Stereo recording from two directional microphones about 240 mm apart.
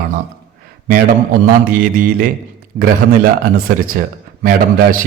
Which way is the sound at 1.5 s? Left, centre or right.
Right.